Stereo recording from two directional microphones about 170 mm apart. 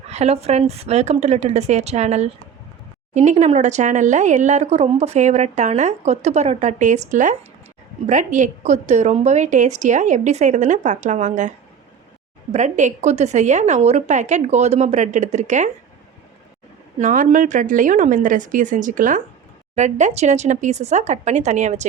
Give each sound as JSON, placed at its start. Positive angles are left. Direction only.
{"t": 0.1, "sound": "speech", "side_deg": -40}
{"t": 17.0, "sound": "speech", "side_deg": -50}